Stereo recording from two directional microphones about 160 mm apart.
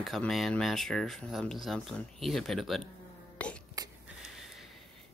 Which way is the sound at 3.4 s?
10° left (ahead or behind).